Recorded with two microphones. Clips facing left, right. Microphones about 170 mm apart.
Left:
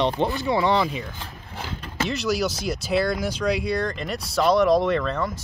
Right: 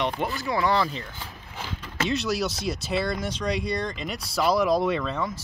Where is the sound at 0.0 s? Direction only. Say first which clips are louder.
Left 5 dB; 30° left (ahead or behind).